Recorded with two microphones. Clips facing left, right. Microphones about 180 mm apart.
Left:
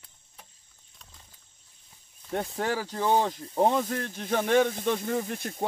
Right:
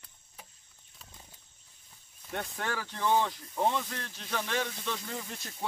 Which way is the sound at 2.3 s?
30° left (ahead or behind).